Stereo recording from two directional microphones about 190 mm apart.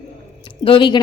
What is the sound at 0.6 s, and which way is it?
Speech, 25° left (ahead or behind).